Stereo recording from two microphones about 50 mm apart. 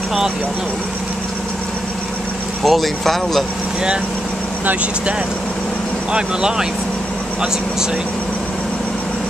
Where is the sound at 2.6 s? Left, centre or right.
Centre.